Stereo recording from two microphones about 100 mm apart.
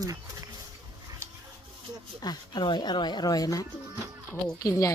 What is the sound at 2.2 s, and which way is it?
Speech, 45° left (ahead or behind).